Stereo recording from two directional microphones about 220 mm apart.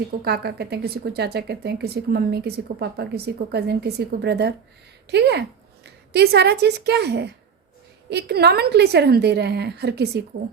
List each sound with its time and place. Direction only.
0.3 s a woman's voice: 45° right (ahead or behind)